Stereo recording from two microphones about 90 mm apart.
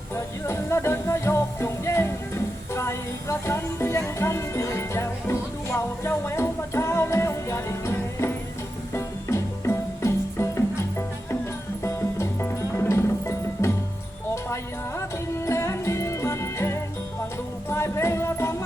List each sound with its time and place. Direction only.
0.4 s music: 30° left (ahead or behind)